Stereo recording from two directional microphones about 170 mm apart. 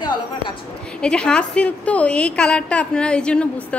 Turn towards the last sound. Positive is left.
turn(degrees=5)  # may be behind; listen again after turning